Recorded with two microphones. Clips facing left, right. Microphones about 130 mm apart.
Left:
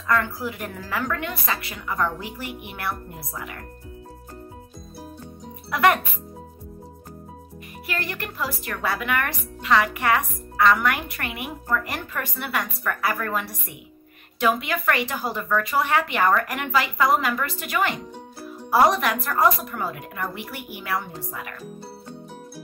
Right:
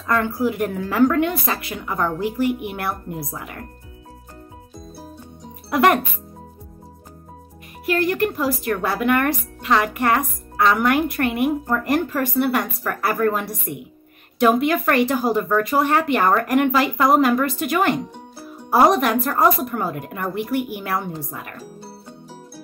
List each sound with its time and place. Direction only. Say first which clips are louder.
0.0 s a woman's voice: right 4 dB; 45° right (ahead or behind)
2.4 s speech: right 7 dB; 50° right (ahead or behind)
5.7 s speech: right 3 dB; 45° right (ahead or behind)
7.8 s speech: right 12 dB; 50° right (ahead or behind)